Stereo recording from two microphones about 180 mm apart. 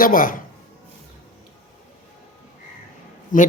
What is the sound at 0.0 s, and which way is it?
Speech, 50° left (ahead or behind).